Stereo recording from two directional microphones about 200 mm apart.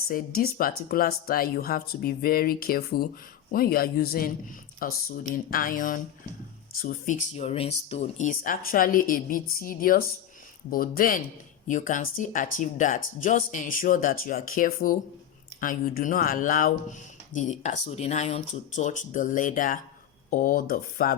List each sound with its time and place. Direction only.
0.1 s speech: 45° left (ahead or behind)